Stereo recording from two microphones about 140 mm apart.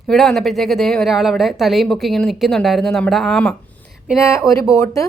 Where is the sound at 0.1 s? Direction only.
Centre (ahead or behind).